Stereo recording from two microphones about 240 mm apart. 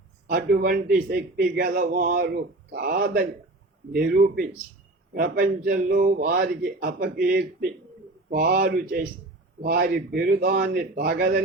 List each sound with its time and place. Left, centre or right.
0.3 s a man's voice: right